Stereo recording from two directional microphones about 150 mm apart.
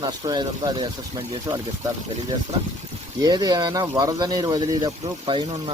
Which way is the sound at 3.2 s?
30° right (ahead or behind).